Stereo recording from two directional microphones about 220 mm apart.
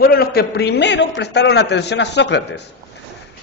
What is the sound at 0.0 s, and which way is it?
A man's voice, 45° left (ahead or behind).